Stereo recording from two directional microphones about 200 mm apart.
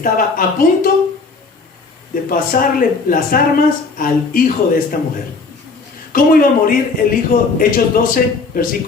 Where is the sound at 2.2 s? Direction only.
45° left (ahead or behind).